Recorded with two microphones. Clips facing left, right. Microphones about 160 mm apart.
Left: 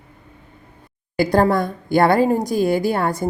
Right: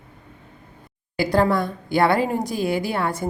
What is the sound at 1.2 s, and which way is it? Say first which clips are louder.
A woman's voice: left 3 dB; 45° left (ahead or behind).